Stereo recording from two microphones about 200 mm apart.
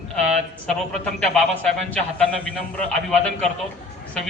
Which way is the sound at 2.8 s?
5° left (ahead or behind).